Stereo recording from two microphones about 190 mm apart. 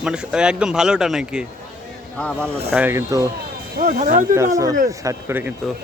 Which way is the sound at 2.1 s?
5° left (ahead or behind).